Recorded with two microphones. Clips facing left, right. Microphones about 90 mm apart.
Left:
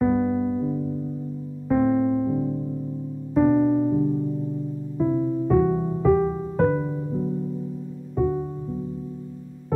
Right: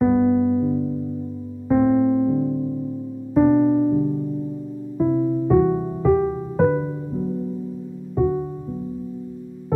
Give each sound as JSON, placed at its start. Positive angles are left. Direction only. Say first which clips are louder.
{"t": 0.0, "sound": "electric piano", "louder": "right 4 dB", "side_deg": -10}
{"t": 3.3, "sound": "piano", "louder": "right 3 dB", "side_deg": -5}
{"t": 4.9, "sound": "music", "louder": "right 3 dB", "side_deg": -5}